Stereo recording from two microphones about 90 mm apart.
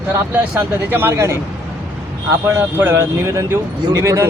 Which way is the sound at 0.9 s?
25° right (ahead or behind).